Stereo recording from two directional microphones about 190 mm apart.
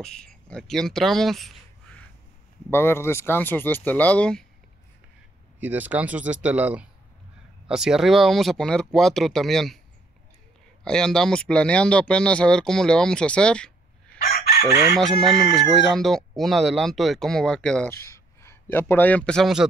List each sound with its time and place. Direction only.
0.0 s speech: 5° left (ahead or behind)
5.6 s speech: 10° right (ahead or behind)
10.8 s speech: 5° left (ahead or behind)
14.1 s chicken: 50° left (ahead or behind)
15.0 s speech: centre (ahead or behind)